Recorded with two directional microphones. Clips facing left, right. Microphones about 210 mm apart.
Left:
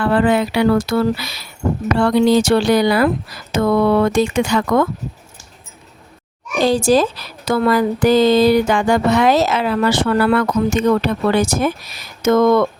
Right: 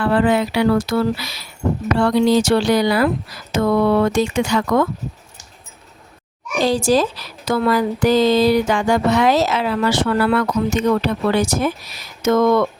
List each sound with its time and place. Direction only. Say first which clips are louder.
0.0 s speech: left 1 dB; 55° left (ahead or behind)
6.7 s a woman's voice: left 2 dB; 55° left (ahead or behind)